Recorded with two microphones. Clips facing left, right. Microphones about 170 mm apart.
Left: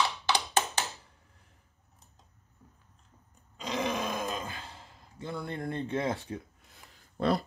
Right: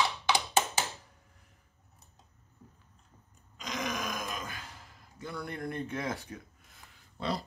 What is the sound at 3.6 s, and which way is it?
Grunt, 35° left (ahead or behind).